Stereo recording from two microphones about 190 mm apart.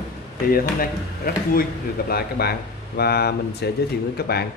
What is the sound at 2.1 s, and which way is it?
Speech, 55° left (ahead or behind).